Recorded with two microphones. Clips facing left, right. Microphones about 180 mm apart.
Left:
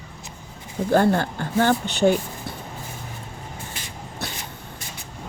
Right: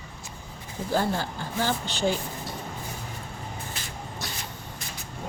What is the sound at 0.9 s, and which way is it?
Speech, 60° left (ahead or behind).